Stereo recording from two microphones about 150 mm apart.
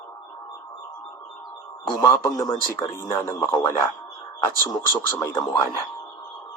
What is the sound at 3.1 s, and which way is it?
A man's voice, 15° left (ahead or behind).